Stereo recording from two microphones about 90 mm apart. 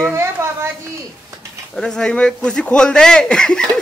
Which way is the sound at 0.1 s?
30° right (ahead or behind).